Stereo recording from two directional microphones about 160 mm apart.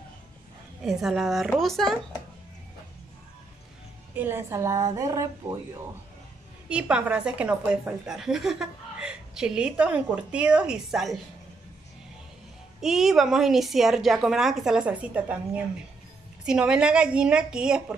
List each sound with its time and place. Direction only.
0.8 s a woman's voice: 5° right (ahead or behind)
4.1 s speech: 15° right (ahead or behind)
6.7 s a woman's voice: 5° right (ahead or behind)
12.8 s a woman's voice: centre (ahead or behind)